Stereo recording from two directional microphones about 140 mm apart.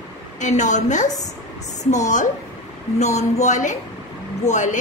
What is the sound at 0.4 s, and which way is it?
A woman's voice, 60° left (ahead or behind).